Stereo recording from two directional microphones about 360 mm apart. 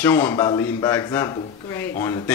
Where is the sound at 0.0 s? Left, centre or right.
Centre.